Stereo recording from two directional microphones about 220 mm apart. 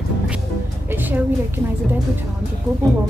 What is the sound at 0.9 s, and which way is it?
Speech, 10° right (ahead or behind).